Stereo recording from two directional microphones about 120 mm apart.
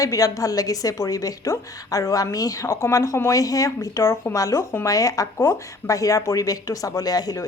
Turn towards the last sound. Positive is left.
turn(degrees=30)  # may be behind; listen again after turning